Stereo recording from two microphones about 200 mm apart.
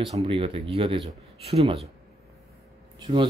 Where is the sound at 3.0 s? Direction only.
25° right (ahead or behind).